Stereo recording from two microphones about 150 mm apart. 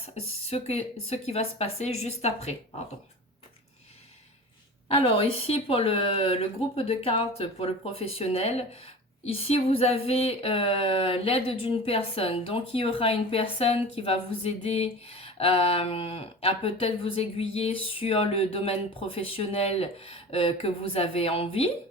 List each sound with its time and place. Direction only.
0.0 s speech: 45° left (ahead or behind)
4.9 s speech: 40° left (ahead or behind)